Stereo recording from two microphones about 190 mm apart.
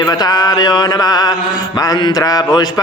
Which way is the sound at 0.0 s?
20° left (ahead or behind).